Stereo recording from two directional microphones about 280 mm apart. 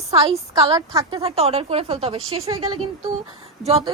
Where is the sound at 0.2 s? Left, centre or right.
Centre.